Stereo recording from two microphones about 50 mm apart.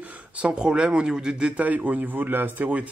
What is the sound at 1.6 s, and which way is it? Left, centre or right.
Speech, right.